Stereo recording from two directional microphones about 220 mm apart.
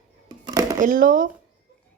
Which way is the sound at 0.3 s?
20° right (ahead or behind).